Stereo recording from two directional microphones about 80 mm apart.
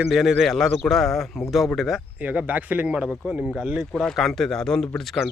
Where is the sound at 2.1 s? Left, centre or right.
Centre.